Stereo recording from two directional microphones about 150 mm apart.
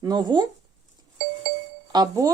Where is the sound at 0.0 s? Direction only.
25° right (ahead or behind).